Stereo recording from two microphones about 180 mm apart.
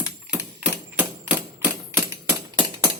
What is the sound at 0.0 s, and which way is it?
Typewriter, 5° right (ahead or behind).